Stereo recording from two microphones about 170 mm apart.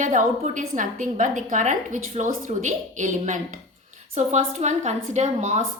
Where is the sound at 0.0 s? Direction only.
50° right (ahead or behind).